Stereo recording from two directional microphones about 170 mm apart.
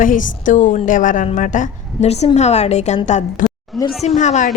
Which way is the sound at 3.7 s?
Centre (ahead or behind).